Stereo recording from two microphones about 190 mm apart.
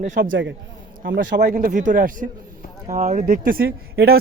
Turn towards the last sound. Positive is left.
turn(degrees=-55)  # may be behind; listen again after turning